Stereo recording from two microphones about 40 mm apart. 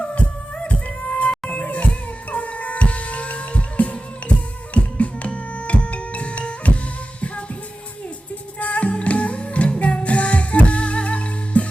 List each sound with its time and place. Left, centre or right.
0.6 s music: left
8.5 s music: left